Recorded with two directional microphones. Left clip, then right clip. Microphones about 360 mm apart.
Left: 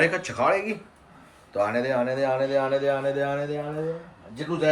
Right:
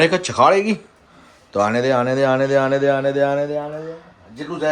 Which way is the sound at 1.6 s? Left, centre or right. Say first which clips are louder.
Right 7 dB; centre.